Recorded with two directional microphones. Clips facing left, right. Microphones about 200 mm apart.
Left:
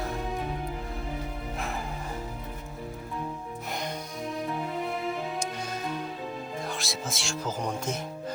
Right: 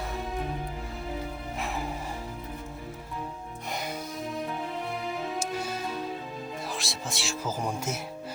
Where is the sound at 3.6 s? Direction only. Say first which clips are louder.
Right 1 dB; 5° right (ahead or behind).